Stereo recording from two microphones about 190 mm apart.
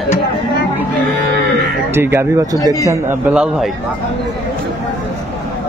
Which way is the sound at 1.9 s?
10° right (ahead or behind).